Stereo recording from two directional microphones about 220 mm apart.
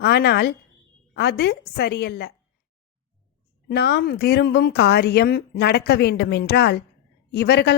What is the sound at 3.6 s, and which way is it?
A woman's voice, 50° left (ahead or behind).